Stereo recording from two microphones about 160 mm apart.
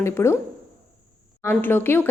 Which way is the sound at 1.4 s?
15° left (ahead or behind).